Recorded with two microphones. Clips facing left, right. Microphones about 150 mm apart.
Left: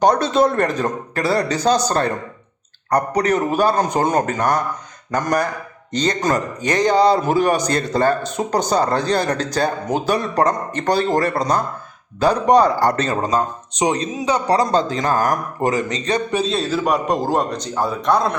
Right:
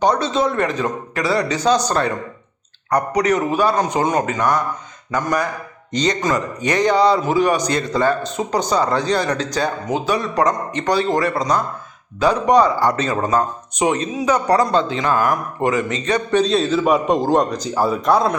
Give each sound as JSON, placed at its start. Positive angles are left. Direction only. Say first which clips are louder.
{"t": 0.0, "sound": "speech", "louder": "left 2 dB", "side_deg": 55}
{"t": 3.2, "sound": "a man's voice", "louder": "right 1 dB", "side_deg": 35}
{"t": 10.2, "sound": "speech", "louder": "right 1 dB", "side_deg": 35}
{"t": 10.8, "sound": "a man's voice", "louder": "even", "side_deg": 50}
{"t": 11.1, "sound": "speech", "louder": "even", "side_deg": 35}
{"t": 13.1, "sound": "speech", "louder": "right 1 dB", "side_deg": 20}
{"t": 13.8, "sound": "speech", "louder": "right 1 dB", "side_deg": 35}
{"t": 16.3, "sound": "a man's voice", "louder": "right 4 dB", "side_deg": 5}